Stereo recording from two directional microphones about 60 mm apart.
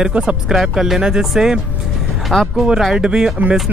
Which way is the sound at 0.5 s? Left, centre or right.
Centre.